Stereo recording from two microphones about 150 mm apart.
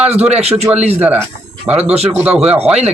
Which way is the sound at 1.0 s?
10° right (ahead or behind).